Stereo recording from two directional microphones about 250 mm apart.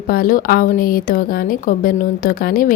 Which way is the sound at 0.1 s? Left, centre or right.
Left.